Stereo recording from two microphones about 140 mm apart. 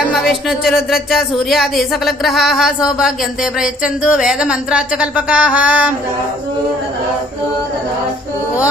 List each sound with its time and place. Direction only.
0.1 s speech: centre (ahead or behind)